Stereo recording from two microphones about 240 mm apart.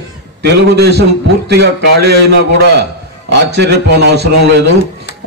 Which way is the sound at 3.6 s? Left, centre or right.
Right.